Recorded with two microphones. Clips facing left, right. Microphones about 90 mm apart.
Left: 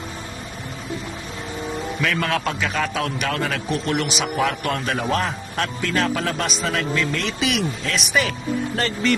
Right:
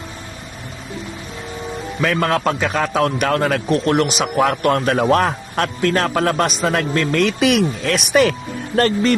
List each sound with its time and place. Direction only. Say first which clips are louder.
2.0 s a man's voice: right 6 dB; 40° right (ahead or behind); by 8.9 s 55° right (ahead or behind)